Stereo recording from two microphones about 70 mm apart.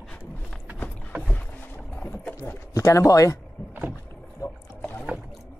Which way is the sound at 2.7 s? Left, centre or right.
Left.